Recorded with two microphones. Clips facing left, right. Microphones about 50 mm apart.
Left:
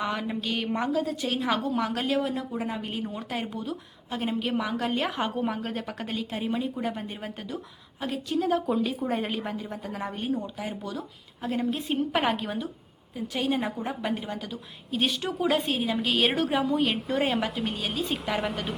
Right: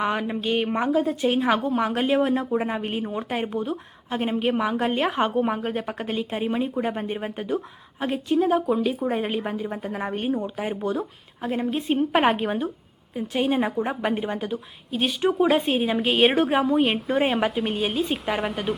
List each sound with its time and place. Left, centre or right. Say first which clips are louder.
0.0 s a woman's voice: right 5 dB; right
8.4 s speech: right 3 dB; centre
9.4 s a woman's voice: right 5 dB; right
14.8 s speech: right 2 dB; centre
15.2 s a woman's voice: right 6 dB; right